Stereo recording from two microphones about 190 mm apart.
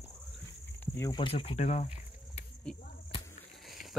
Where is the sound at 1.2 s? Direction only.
30° left (ahead or behind).